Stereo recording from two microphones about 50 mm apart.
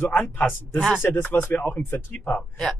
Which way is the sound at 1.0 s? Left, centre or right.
Left.